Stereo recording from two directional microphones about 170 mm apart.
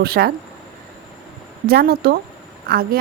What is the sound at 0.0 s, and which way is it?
Speech, 70° right (ahead or behind).